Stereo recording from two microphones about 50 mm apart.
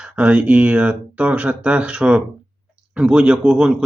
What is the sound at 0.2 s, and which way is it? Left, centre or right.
Speech, right.